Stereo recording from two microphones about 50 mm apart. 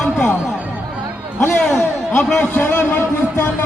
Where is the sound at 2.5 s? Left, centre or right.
Left.